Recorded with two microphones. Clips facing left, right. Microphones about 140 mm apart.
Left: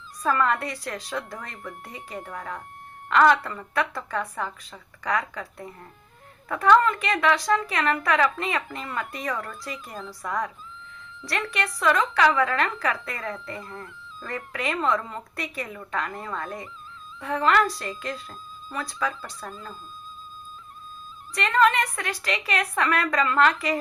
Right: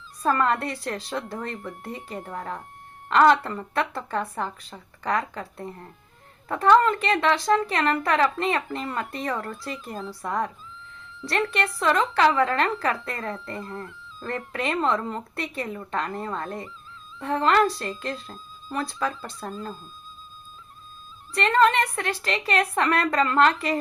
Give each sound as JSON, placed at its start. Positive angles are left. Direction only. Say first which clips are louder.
{"t": 0.2, "sound": "a woman's voice", "louder": "right 1 dB", "side_deg": -35}
{"t": 21.3, "sound": "a woman's voice", "louder": "right 1 dB", "side_deg": -30}